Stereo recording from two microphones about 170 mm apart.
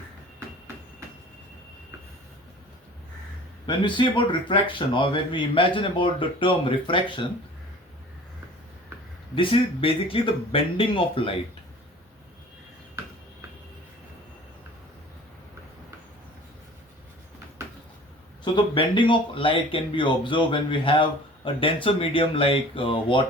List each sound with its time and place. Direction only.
3.7 s speech: 25° left (ahead or behind)
9.3 s speech: 30° left (ahead or behind)
18.5 s speech: 30° left (ahead or behind)